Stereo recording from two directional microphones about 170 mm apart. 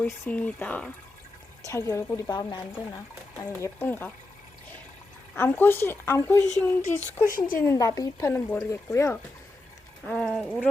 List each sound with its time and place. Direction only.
0.0 s speech: 10° left (ahead or behind)
5.3 s speech: 10° left (ahead or behind)
7.3 s speech: 55° left (ahead or behind)
7.6 s speech: 20° left (ahead or behind)
10.0 s speech: centre (ahead or behind)